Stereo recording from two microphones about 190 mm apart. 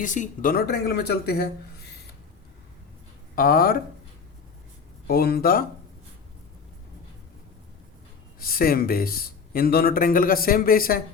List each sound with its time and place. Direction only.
0.0 s speech: 40° left (ahead or behind)
3.3 s speech: 50° left (ahead or behind)
5.0 s speech: 55° left (ahead or behind)
8.4 s speech: 50° left (ahead or behind)